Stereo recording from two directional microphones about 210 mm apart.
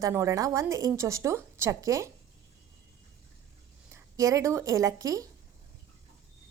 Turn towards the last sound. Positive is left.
turn(degrees=-15)  # may be behind; listen again after turning